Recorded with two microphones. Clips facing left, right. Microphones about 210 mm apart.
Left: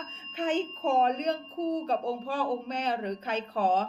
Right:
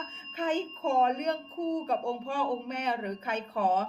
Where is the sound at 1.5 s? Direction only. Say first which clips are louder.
Left 1 dB; 35° left (ahead or behind).